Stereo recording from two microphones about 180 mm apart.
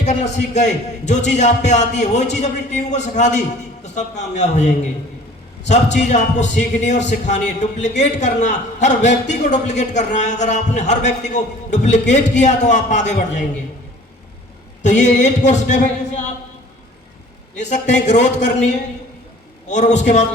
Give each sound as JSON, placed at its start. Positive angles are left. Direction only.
{"t": 0.0, "sound": "a man's voice", "side_deg": 40}
{"t": 14.8, "sound": "a sound", "side_deg": 40}
{"t": 17.6, "sound": "a man's voice", "side_deg": 40}